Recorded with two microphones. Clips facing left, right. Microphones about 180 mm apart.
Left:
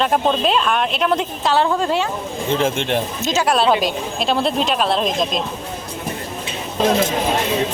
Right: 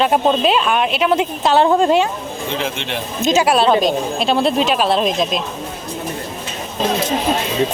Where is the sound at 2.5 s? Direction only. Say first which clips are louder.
Left 6 dB; 50° left (ahead or behind).